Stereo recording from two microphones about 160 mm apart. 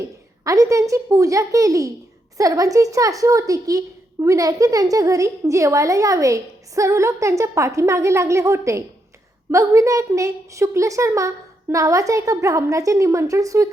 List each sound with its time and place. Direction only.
0.4 s a woman's voice: 20° right (ahead or behind)